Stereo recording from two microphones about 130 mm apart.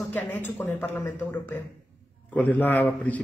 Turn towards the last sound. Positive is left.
turn(degrees=10)  # may be behind; listen again after turning